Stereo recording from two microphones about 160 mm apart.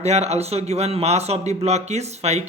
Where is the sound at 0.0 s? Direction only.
40° right (ahead or behind).